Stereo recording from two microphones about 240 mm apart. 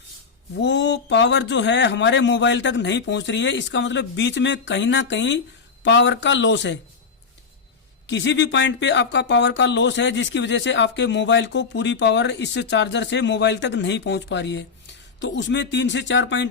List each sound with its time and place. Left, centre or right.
0.6 s speech: left
8.0 s speech: left